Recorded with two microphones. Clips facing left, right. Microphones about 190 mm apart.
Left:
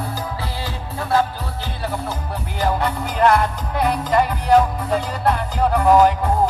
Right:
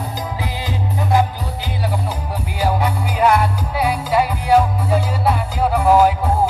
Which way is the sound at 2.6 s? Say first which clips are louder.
Right 1 dB; 10° right (ahead or behind).